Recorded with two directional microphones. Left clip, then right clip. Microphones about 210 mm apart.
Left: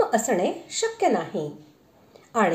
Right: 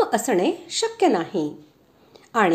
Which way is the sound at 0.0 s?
30° right (ahead or behind).